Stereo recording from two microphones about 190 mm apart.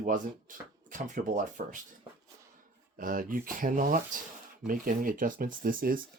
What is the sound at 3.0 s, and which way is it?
Speech, 45° right (ahead or behind).